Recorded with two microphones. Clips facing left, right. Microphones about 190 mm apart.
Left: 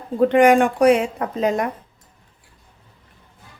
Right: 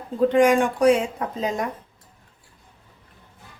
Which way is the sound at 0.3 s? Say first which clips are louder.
Left 3 dB; 65° left (ahead or behind).